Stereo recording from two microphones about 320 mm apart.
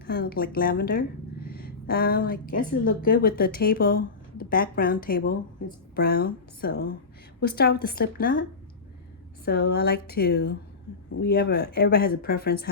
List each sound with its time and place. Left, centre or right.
0.0 s speech: left
9.4 s speech: left